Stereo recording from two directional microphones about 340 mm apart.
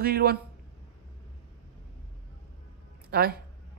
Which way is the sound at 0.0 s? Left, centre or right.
Right.